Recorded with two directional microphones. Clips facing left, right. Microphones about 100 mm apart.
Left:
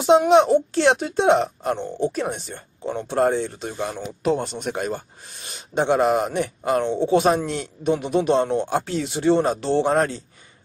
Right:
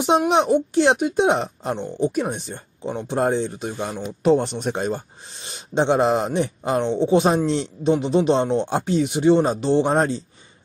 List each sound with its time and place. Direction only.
0.3 s speech: 20° right (ahead or behind)